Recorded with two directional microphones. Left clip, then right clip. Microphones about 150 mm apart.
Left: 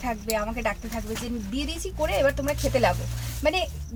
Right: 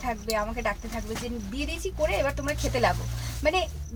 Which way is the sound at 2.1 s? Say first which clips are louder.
Left 5 dB; 5° left (ahead or behind).